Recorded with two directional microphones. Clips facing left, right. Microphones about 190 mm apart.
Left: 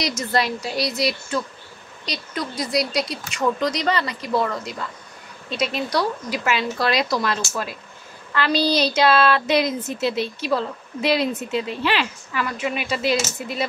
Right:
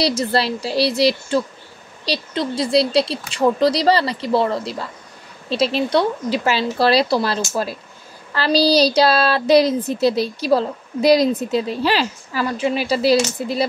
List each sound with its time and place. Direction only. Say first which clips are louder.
0.0 s speech: right 4 dB; 30° right (ahead or behind)